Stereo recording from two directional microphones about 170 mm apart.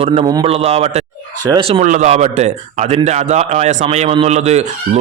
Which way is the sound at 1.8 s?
45° right (ahead or behind).